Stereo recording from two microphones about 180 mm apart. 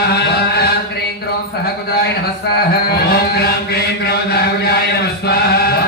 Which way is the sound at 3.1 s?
60° left (ahead or behind).